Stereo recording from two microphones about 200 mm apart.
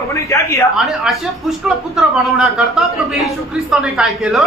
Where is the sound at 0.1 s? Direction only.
15° left (ahead or behind).